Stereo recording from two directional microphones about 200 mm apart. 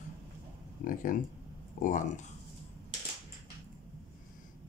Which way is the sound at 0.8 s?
40° left (ahead or behind).